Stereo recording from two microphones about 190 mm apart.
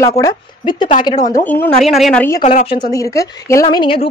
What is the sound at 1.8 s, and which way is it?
Speech, centre (ahead or behind).